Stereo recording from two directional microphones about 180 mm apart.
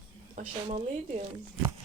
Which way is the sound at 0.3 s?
40° right (ahead or behind).